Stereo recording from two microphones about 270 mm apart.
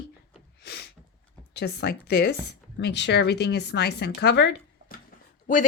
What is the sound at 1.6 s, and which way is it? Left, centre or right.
Speech, left.